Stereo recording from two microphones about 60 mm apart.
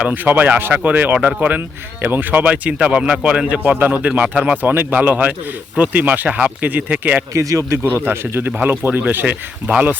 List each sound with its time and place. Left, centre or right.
0.1 s speech: right
3.6 s speech: right
4.5 s speech: right
7.3 s a man's voice: right
7.8 s speech: right